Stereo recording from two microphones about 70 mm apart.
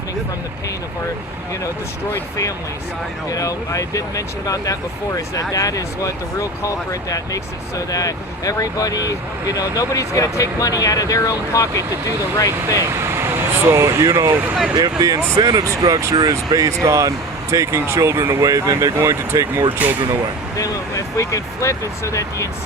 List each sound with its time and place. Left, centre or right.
3.2 s speech: left
12.8 s speech: right
14.8 s speech: right
16.1 s speech: right
20.6 s speech: left